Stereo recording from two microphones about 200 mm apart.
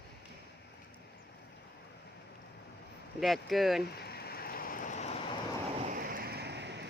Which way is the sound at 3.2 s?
Centre (ahead or behind).